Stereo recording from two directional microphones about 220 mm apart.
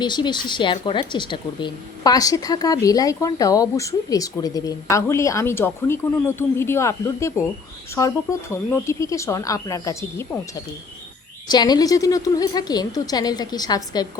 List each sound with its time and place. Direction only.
0.0 s a woman's voice: 20° left (ahead or behind)